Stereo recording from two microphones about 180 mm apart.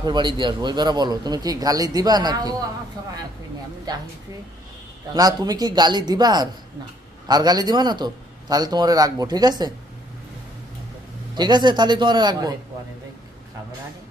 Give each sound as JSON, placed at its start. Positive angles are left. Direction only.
{"t": 0.0, "sound": "a man's voice", "side_deg": -25}
{"t": 3.9, "sound": "a man's voice", "side_deg": -20}
{"t": 5.1, "sound": "a man's voice", "side_deg": -20}
{"t": 11.3, "sound": "a man's voice", "side_deg": -25}